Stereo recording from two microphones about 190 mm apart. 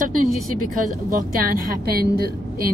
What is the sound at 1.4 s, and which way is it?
Speech, 50° right (ahead or behind).